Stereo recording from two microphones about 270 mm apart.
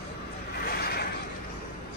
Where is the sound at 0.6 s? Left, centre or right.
Left.